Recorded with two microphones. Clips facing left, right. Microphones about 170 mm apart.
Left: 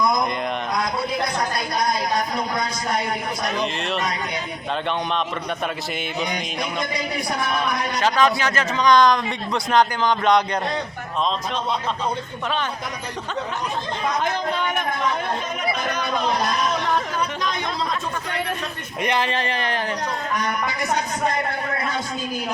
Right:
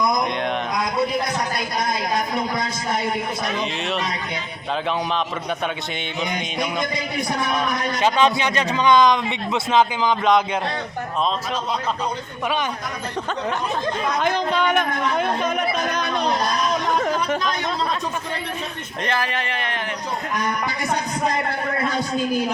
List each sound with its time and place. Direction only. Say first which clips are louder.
3.4 s a man's voice: even; centre (ahead or behind)
8.0 s a man's voice: right 1 dB; 20° right (ahead or behind); by 10.6 s 5° right (ahead or behind)
14.2 s speech: right 5 dB; 90° right
19.0 s speech: left 2 dB; 20° left (ahead or behind)
19.3 s speech: left 2 dB; 30° left (ahead or behind)